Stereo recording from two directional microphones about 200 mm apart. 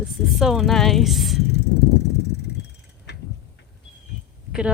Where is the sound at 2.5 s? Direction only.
55° left (ahead or behind).